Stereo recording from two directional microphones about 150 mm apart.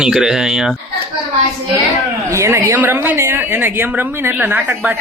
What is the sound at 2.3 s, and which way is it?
A woman's voice, 15° right (ahead or behind).